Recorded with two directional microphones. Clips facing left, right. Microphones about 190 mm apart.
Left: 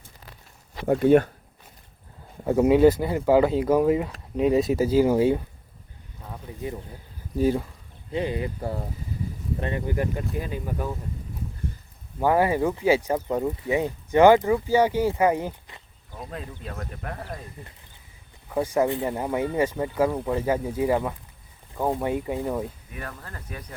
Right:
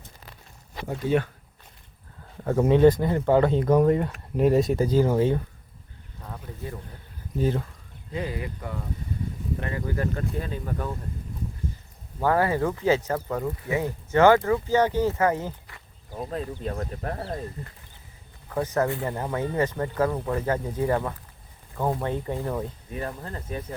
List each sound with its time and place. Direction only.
0.9 s speech: 60° left (ahead or behind)
2.4 s speech: 10° left (ahead or behind)
6.2 s a sound: 15° left (ahead or behind)
7.3 s speech: 10° left (ahead or behind)
8.1 s speech: 25° left (ahead or behind)
9.6 s speech: 25° left (ahead or behind)
12.2 s speech: 15° left (ahead or behind)
16.1 s speech: 35° right (ahead or behind)
18.4 s speech: 10° left (ahead or behind)
23.0 s speech: 25° right (ahead or behind)